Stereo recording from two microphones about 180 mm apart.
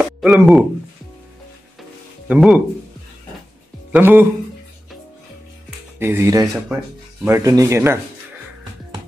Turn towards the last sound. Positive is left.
turn(degrees=-15)  # may be behind; listen again after turning